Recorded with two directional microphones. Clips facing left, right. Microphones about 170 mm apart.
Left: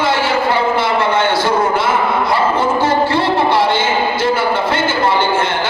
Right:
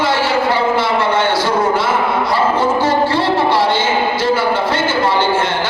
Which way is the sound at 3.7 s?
55° left (ahead or behind).